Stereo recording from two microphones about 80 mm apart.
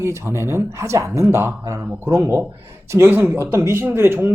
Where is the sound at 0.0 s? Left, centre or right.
Right.